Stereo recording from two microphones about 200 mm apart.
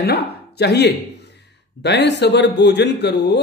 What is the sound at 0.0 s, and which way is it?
Speech, 55° left (ahead or behind).